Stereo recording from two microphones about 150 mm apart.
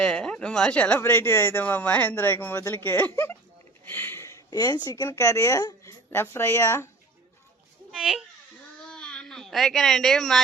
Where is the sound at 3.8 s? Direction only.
15° left (ahead or behind).